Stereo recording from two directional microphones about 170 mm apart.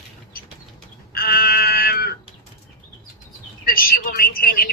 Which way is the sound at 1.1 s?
60° left (ahead or behind).